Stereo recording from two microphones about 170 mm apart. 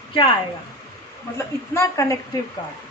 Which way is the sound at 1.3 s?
15° left (ahead or behind).